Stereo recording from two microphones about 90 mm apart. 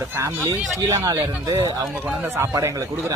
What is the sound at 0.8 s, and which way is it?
Speech, 45° right (ahead or behind).